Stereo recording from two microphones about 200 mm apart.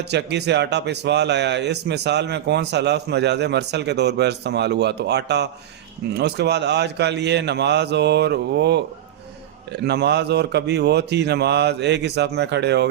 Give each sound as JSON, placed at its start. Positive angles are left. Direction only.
{"t": 0.0, "sound": "speech", "side_deg": -55}